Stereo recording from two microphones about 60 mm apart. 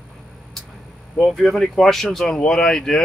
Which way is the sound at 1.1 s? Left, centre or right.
Centre.